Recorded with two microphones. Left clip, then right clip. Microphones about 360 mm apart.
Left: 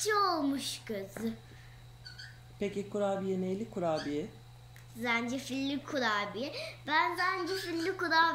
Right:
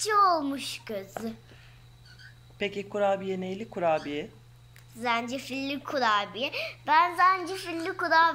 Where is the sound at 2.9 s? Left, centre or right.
Right.